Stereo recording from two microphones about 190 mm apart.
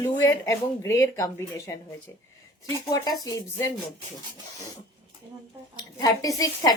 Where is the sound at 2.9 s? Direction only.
20° left (ahead or behind).